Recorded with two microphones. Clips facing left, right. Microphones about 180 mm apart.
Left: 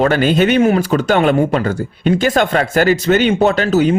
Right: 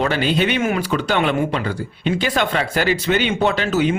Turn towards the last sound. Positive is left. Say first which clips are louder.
# left 5 dB
turn(degrees=40)  # may be behind; listen again after turning